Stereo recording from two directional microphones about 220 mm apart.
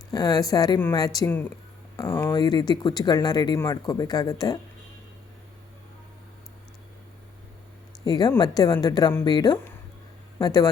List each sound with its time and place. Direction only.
0.1 s speech: 15° left (ahead or behind)
8.0 s speech: 20° left (ahead or behind)